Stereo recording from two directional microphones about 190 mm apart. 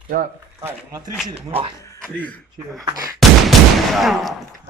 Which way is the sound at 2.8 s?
20° right (ahead or behind).